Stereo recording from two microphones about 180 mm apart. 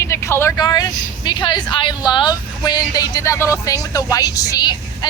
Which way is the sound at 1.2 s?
25° left (ahead or behind).